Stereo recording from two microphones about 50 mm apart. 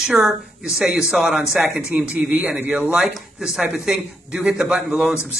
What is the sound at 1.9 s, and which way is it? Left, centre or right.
Speech, right.